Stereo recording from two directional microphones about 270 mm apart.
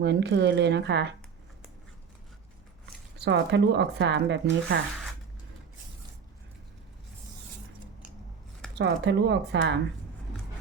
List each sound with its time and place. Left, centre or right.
0.0 s speech: right
3.2 s speech: right
8.7 s speech: right